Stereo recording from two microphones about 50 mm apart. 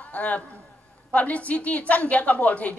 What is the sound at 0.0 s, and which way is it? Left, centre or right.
A man's voice, left.